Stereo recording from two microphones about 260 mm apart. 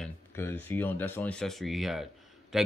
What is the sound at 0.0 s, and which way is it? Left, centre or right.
Speech, centre.